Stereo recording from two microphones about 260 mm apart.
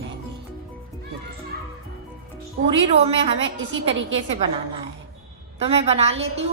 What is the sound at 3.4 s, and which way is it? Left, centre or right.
Speech, right.